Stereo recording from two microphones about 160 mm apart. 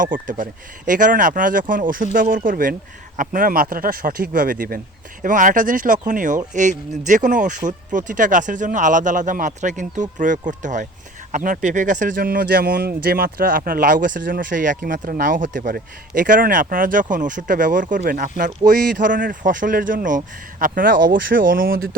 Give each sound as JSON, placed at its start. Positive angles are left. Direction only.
{"t": 0.0, "sound": "a man's voice", "side_deg": -55}